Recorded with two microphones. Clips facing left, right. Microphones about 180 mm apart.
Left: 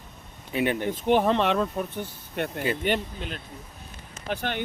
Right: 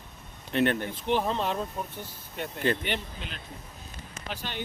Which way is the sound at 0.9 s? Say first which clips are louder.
Left 6 dB; 55° left (ahead or behind).